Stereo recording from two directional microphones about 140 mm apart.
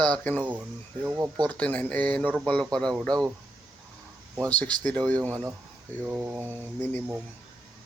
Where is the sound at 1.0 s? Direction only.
15° right (ahead or behind).